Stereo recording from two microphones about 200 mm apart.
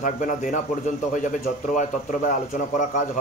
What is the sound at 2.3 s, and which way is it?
Speech, 40° left (ahead or behind).